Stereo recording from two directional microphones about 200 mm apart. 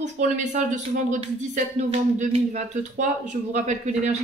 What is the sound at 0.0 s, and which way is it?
A woman's voice, 35° right (ahead or behind).